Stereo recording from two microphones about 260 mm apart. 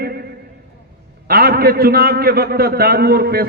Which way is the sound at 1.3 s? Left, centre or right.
Right.